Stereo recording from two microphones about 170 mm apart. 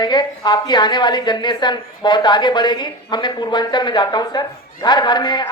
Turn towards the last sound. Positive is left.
turn(degrees=25)  # may be behind; listen again after turning